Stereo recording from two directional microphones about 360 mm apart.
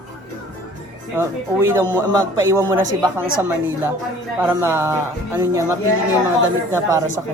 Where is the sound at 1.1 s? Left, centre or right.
Centre.